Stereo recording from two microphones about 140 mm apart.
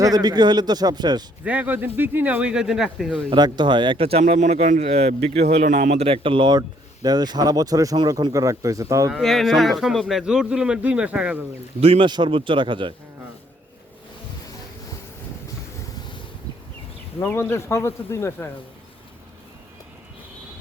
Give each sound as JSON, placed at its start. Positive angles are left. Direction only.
{"t": 0.0, "sound": "a man's voice", "side_deg": -25}
{"t": 1.5, "sound": "speech", "side_deg": -10}
{"t": 3.2, "sound": "speech", "side_deg": -30}
{"t": 9.1, "sound": "speech", "side_deg": 0}
{"t": 11.8, "sound": "speech", "side_deg": -40}
{"t": 17.2, "sound": "speech", "side_deg": 20}